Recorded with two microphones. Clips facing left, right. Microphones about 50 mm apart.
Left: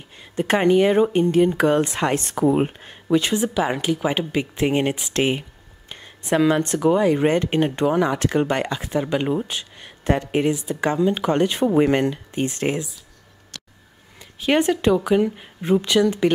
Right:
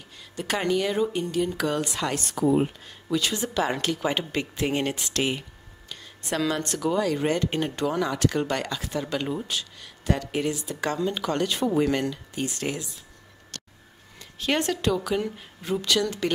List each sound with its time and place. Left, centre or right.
0.2 s speech: left
3.5 s speech: centre
4.6 s speech: left
14.1 s speech: centre